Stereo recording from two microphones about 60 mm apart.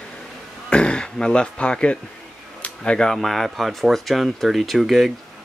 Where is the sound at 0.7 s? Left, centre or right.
Centre.